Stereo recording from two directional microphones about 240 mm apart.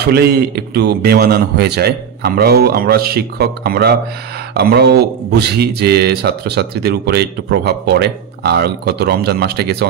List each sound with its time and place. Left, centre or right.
0.0 s a man's voice: right